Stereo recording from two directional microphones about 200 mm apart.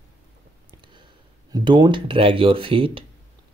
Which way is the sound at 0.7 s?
25° right (ahead or behind).